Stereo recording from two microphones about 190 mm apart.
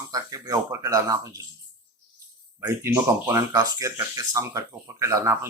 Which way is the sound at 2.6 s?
15° right (ahead or behind).